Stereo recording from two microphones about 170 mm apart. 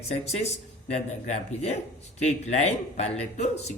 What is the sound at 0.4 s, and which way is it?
Speech, 40° left (ahead or behind).